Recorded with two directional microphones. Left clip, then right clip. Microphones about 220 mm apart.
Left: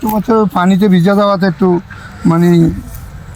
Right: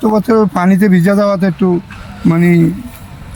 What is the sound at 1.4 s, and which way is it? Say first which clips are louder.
Speech: left 2 dB; 20° right (ahead or behind).